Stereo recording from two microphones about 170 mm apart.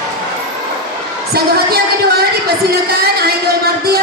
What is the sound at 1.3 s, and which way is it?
Speech, 65° right (ahead or behind).